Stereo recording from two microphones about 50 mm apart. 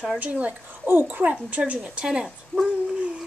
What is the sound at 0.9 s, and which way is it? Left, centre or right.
Speech, right.